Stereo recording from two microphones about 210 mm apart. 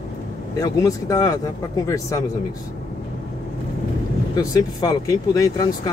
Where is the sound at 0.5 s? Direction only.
15° left (ahead or behind).